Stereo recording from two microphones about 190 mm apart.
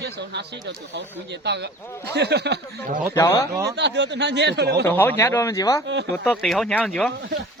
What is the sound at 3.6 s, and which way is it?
Speech, 65° right (ahead or behind).